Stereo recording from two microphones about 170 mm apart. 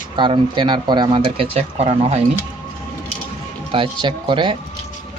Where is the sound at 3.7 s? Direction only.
30° right (ahead or behind).